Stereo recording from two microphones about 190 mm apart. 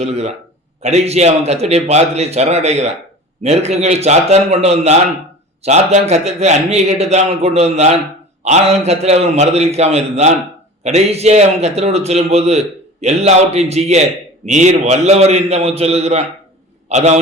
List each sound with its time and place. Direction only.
0.0 s a man's voice: 35° right (ahead or behind)